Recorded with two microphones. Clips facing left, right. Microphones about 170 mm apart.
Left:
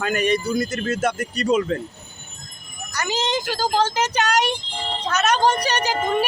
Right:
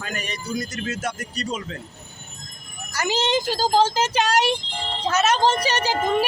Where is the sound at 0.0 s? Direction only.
60° left (ahead or behind).